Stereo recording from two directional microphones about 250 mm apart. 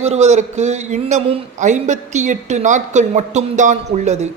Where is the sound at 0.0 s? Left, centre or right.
Right.